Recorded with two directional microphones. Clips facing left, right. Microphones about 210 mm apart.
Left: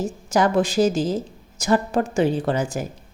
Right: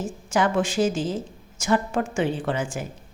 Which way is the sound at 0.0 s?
40° left (ahead or behind).